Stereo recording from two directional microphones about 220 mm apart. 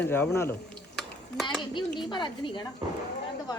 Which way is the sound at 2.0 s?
20° left (ahead or behind).